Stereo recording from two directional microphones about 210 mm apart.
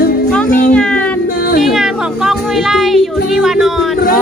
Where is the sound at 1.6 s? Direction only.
Centre (ahead or behind).